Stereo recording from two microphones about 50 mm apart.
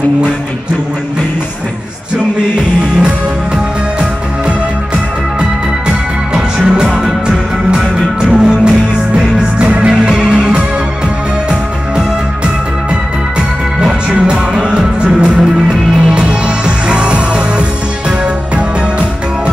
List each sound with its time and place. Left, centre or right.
5.4 s music: centre
14.5 s music: centre